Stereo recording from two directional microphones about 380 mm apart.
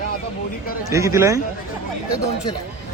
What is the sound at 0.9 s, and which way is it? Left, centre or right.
Speech, centre.